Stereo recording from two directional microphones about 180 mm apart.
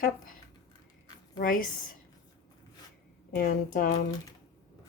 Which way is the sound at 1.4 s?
50° left (ahead or behind).